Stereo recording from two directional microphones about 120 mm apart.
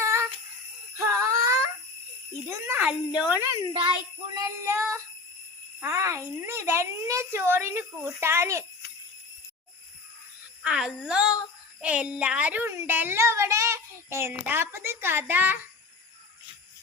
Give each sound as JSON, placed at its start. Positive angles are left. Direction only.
{"t": 0.0, "sound": "jingle bell", "side_deg": -20}
{"t": 0.9, "sound": "a sound", "side_deg": -25}
{"t": 2.6, "sound": "female singing", "side_deg": -15}
{"t": 4.4, "sound": "a child's voice", "side_deg": -25}
{"t": 10.6, "sound": "female singing", "side_deg": -5}
{"t": 11.8, "sound": "a child's voice", "side_deg": -10}